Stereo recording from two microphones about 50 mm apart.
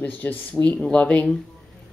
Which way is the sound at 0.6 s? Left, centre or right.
Left.